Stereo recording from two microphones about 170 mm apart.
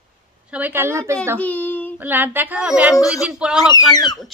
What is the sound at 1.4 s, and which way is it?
Speech, 10° left (ahead or behind).